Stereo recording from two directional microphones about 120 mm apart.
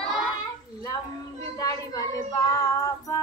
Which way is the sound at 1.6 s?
30° left (ahead or behind).